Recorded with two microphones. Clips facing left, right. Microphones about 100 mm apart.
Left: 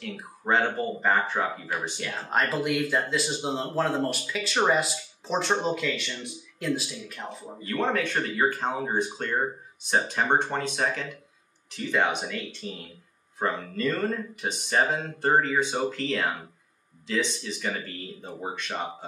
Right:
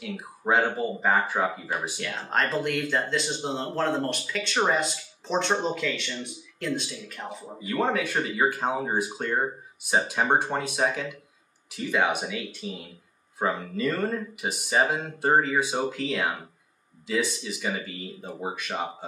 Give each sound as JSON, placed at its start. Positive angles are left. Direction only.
{"t": 0.0, "sound": "speech", "side_deg": -5}
{"t": 7.6, "sound": "speech", "side_deg": -10}